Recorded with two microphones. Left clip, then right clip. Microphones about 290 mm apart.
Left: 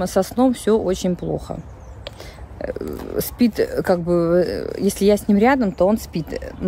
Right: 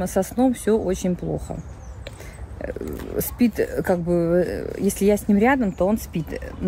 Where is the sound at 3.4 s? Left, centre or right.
Centre.